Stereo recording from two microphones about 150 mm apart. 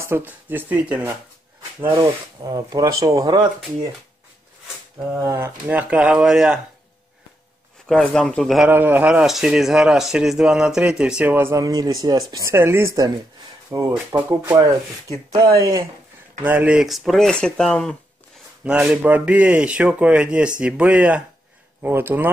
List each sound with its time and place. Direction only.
0.0 s speech: 15° right (ahead or behind)
2.4 s speech: 25° right (ahead or behind)
5.2 s speech: 20° right (ahead or behind)
7.9 s speech: 5° left (ahead or behind)
8.6 s speech: 10° right (ahead or behind)
16.4 s speech: 10° right (ahead or behind)
18.6 s speech: 10° right (ahead or behind)